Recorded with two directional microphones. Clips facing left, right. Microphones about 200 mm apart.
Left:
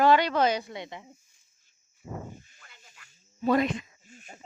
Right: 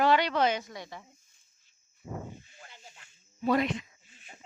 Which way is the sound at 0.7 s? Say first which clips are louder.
Left 4 dB; 20° left (ahead or behind).